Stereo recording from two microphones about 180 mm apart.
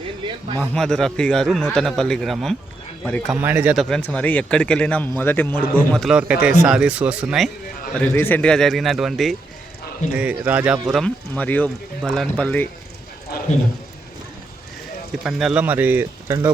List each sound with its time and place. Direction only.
0.3 s speech: 25° right (ahead or behind)
0.7 s speech: 5° left (ahead or behind)
3.8 s a man's voice: 5° left (ahead or behind)
5.9 s speech: centre (ahead or behind)
7.9 s speech: 10° left (ahead or behind)
13.3 s a sound: 60° left (ahead or behind)
15.2 s speech: 5° right (ahead or behind)